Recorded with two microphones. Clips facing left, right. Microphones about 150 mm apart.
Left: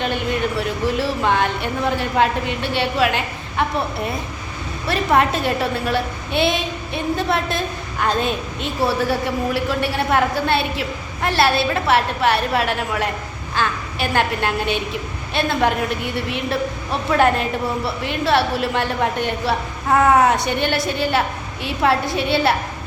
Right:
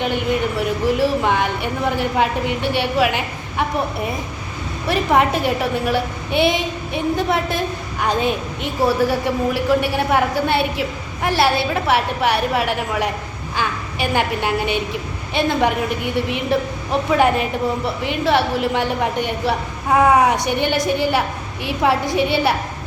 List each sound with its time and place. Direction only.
0.0 s a woman's voice: 15° right (ahead or behind)